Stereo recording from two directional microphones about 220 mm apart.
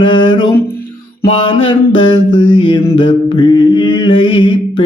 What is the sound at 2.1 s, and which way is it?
Mantra, 20° left (ahead or behind).